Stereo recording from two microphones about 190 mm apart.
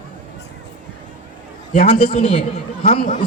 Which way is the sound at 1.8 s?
30° left (ahead or behind).